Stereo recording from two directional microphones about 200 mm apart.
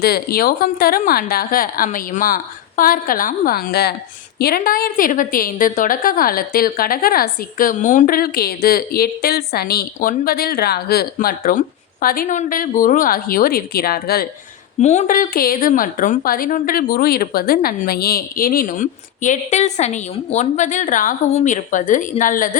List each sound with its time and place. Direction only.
0.0 s a woman's voice: 50° left (ahead or behind)
14.8 s a woman's voice: 35° left (ahead or behind)